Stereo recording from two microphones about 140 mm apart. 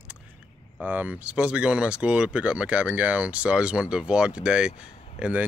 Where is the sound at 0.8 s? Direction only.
10° right (ahead or behind).